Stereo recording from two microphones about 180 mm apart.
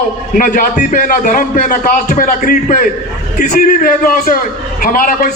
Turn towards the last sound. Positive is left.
turn(degrees=50)  # may be behind; listen again after turning